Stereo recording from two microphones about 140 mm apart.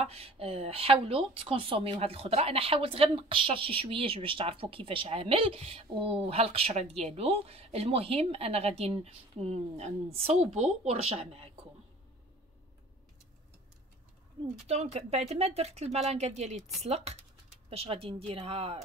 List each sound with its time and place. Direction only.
0.0 s a woman's voice: 45° right (ahead or behind)
14.4 s a woman's voice: 45° right (ahead or behind)